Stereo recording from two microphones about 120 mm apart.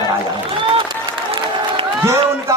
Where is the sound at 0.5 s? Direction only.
45° right (ahead or behind).